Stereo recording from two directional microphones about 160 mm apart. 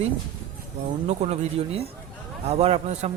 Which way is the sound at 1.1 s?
45° right (ahead or behind).